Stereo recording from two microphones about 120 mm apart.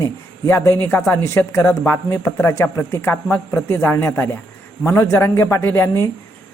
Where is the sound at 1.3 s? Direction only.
25° left (ahead or behind).